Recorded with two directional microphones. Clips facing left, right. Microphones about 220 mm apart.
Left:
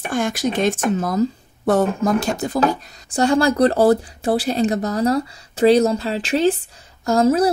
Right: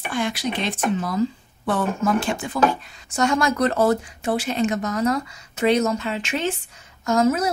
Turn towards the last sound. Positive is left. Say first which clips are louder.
# left 4 dB
turn(degrees=35)  # may be behind; listen again after turning